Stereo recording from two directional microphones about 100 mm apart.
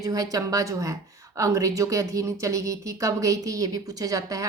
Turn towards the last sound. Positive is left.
turn(degrees=-35)  # may be behind; listen again after turning